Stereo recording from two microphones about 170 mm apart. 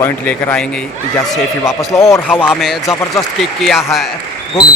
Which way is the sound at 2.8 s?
15° left (ahead or behind).